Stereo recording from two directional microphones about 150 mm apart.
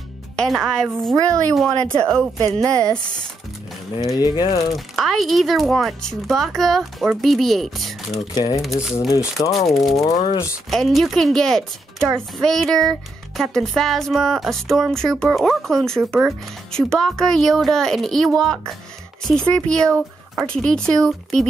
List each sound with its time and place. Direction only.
0.4 s speech: centre (ahead or behind)
2.6 s speech: 25° right (ahead or behind)
4.0 s speech: 25° left (ahead or behind)
4.7 s speech: centre (ahead or behind)
8.4 s speech: 25° left (ahead or behind)
9.7 s speech: centre (ahead or behind)
9.9 s speech: 20° left (ahead or behind)
10.7 s speech: centre (ahead or behind)